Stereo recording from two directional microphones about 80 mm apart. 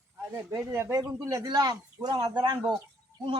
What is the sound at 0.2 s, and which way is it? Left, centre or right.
A man's voice, right.